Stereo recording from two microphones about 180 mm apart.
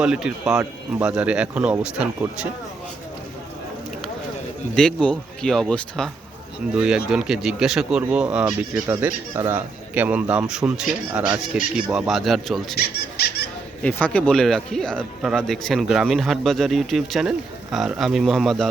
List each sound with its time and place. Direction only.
0.0 s speech: 5° right (ahead or behind)
4.7 s speech: 5° left (ahead or behind)
12.7 s squeak: 65° left (ahead or behind)
13.8 s speech: 5° left (ahead or behind)